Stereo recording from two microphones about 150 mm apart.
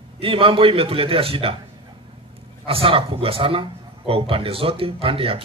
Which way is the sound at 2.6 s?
35° right (ahead or behind).